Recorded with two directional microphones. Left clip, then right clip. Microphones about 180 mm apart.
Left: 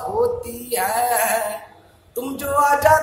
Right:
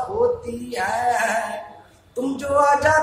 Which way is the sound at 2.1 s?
55° left (ahead or behind).